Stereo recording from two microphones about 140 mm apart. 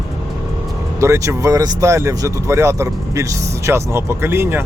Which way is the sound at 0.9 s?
20° right (ahead or behind).